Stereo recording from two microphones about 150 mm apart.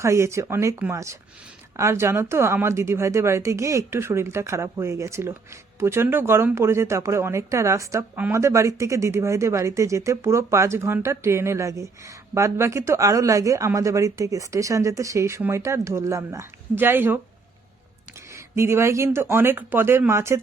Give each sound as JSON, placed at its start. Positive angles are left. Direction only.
{"t": 0.0, "sound": "speech", "side_deg": -20}
{"t": 18.3, "sound": "speech", "side_deg": -15}